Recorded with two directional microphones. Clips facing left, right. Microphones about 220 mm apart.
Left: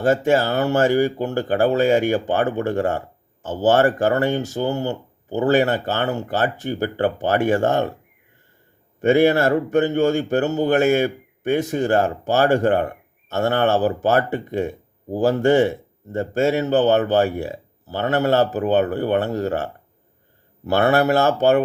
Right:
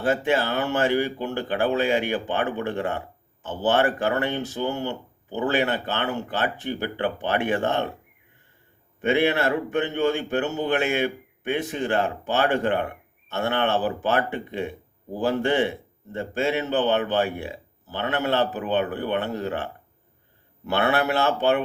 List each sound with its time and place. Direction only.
0.0 s speech: 40° left (ahead or behind)
9.0 s speech: 40° left (ahead or behind)